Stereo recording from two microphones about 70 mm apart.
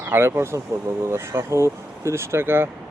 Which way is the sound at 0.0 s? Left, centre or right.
Right.